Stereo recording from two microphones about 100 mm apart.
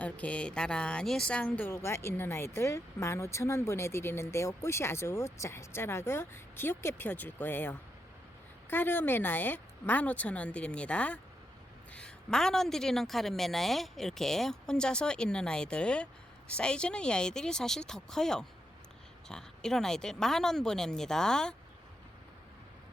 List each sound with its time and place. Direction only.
0.0 s a woman's voice: 15° left (ahead or behind)